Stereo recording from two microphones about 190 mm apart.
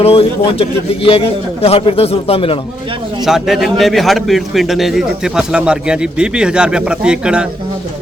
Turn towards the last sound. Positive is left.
turn(degrees=-5)  # may be behind; listen again after turning